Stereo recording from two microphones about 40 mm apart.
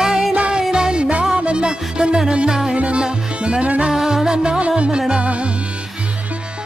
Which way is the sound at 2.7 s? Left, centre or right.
Right.